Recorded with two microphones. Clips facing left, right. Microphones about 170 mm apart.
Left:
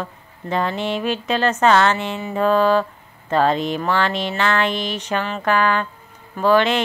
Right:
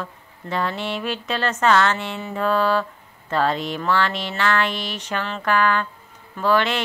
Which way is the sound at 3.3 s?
20° left (ahead or behind).